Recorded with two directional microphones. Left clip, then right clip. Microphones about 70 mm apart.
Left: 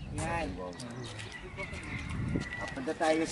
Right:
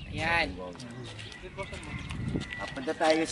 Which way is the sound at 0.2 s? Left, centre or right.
Right.